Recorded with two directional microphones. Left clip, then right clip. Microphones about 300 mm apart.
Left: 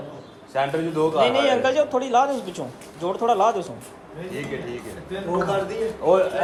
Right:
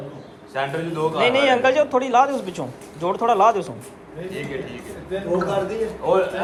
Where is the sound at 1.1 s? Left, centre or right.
Centre.